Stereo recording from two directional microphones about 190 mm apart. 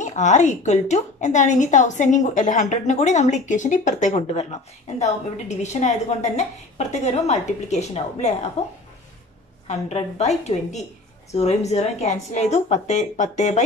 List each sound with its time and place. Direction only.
0.0 s a woman's voice: 40° left (ahead or behind)